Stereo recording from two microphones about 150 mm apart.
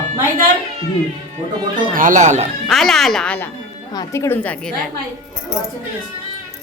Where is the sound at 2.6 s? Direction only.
Centre (ahead or behind).